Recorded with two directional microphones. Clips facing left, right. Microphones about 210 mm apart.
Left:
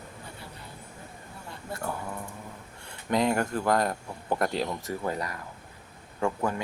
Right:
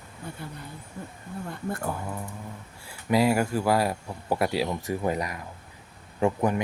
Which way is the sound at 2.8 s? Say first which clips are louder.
Right 3 dB; 5° right (ahead or behind).